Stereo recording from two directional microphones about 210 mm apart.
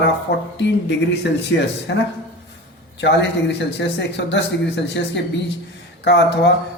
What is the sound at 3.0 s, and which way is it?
Speech, 55° left (ahead or behind).